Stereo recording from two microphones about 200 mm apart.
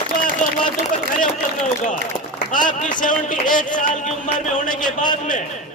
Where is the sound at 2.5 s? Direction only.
40° left (ahead or behind).